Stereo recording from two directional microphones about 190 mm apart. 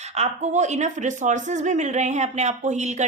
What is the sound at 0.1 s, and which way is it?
A woman's voice, 35° right (ahead or behind).